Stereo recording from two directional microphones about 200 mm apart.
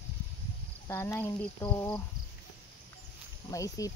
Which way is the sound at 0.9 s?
10° left (ahead or behind).